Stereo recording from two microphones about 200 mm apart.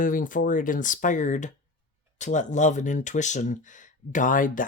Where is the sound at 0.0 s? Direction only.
45° left (ahead or behind).